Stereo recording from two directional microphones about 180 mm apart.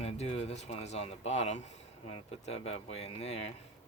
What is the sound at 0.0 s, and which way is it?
Speech, 35° left (ahead or behind).